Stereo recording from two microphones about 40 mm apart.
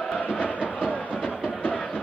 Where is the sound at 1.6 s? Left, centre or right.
Left.